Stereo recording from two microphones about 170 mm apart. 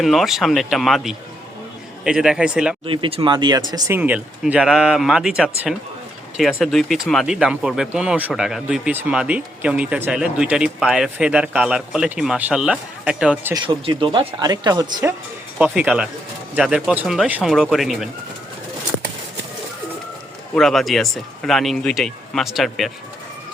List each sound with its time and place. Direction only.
0.0 s speech: centre (ahead or behind)
2.8 s speech: 30° right (ahead or behind); by 13.5 s 5° right (ahead or behind)
13.5 s speech: 30° right (ahead or behind)
15.5 s speech: 10° right (ahead or behind)
20.6 s speech: centre (ahead or behind)